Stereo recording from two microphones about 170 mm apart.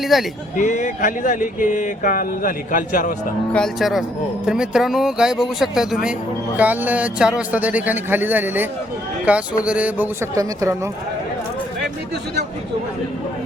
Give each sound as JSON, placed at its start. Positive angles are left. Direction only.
{"t": 0.0, "sound": "speech", "side_deg": 0}
{"t": 0.5, "sound": "a sound", "side_deg": 50}
{"t": 3.5, "sound": "speech", "side_deg": 0}